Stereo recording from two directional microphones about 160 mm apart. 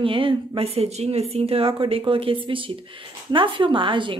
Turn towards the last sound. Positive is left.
turn(degrees=-30)  # may be behind; listen again after turning